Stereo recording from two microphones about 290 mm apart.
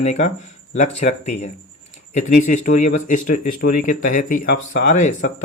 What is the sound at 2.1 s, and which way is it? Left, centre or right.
Speech, left.